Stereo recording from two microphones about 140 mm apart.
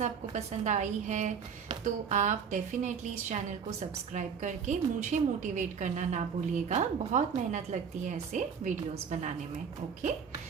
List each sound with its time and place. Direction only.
0.0 s a woman's voice: 60° right (ahead or behind)